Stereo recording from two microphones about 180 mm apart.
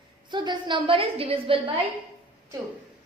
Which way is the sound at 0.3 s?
25° right (ahead or behind).